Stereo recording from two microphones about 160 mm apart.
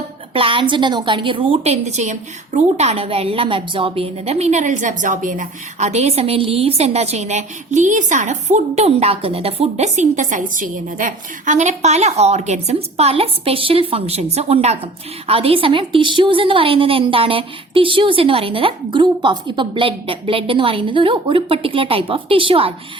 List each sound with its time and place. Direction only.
0.3 s a woman's voice: 35° right (ahead or behind)